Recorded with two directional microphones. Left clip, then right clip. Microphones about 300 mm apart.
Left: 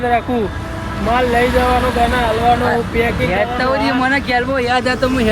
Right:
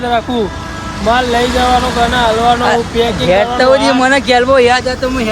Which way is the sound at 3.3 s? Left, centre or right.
Right.